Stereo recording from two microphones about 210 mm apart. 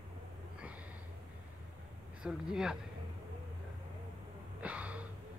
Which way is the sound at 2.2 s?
5° right (ahead or behind).